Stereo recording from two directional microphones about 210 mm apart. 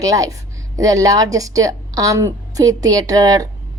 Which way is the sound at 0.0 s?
15° right (ahead or behind).